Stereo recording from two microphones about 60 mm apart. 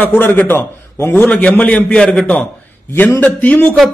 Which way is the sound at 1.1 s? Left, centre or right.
Left.